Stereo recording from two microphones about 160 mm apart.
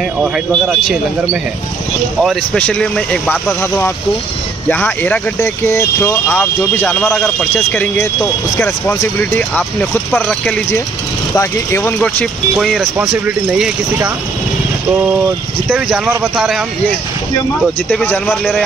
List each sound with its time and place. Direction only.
0.5 s a man's voice: centre (ahead or behind)
7.0 s a man's voice: centre (ahead or behind)
11.3 s speech: 15° left (ahead or behind)
12.0 s a man's voice: 5° left (ahead or behind)
16.3 s a man's voice: centre (ahead or behind)
17.8 s speech: 10° left (ahead or behind)